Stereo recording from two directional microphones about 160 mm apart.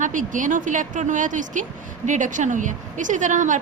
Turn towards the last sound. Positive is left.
turn(degrees=-50)  # may be behind; listen again after turning